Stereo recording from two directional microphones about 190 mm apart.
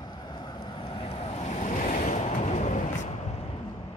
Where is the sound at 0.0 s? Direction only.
20° left (ahead or behind).